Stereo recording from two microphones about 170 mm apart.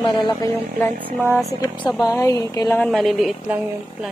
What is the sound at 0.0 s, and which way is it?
Speech, 25° left (ahead or behind).